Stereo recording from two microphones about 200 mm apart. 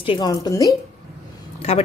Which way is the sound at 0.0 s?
25° left (ahead or behind).